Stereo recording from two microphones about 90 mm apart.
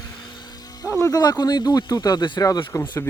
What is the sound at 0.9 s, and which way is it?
Speech, 40° left (ahead or behind).